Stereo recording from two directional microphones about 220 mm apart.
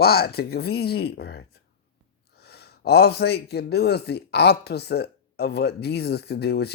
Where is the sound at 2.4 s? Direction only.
45° left (ahead or behind).